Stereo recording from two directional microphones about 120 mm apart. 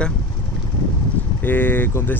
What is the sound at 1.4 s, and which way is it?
Speech, 15° left (ahead or behind).